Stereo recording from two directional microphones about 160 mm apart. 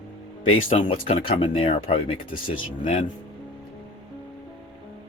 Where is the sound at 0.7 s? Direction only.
40° left (ahead or behind).